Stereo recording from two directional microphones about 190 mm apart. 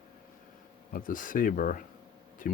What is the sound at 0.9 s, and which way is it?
Speech, 45° left (ahead or behind).